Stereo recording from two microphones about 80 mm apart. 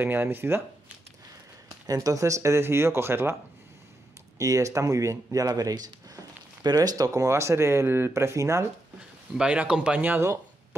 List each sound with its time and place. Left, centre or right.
0.0 s speech: right
1.9 s speech: right
4.4 s speech: right
9.3 s speech: centre